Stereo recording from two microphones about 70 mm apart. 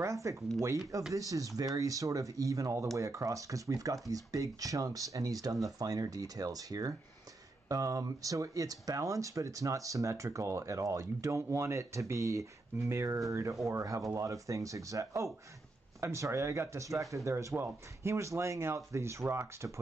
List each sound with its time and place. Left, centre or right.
0.0 s speech: right